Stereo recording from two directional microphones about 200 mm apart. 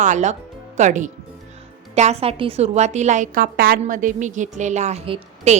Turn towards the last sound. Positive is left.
turn(degrees=-30)  # may be behind; listen again after turning